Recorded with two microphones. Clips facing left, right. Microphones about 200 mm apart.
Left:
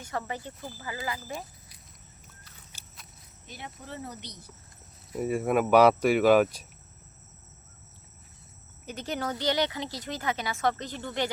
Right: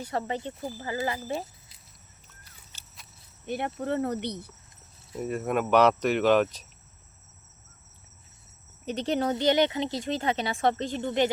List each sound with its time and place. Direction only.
0.1 s speech: 25° right (ahead or behind)
2.7 s horse: 10° left (ahead or behind)
3.4 s speech: 60° right (ahead or behind)
5.1 s speech: 10° left (ahead or behind)
8.9 s speech: 30° right (ahead or behind)